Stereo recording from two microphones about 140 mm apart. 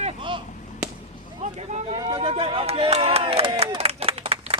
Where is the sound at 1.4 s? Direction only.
55° right (ahead or behind).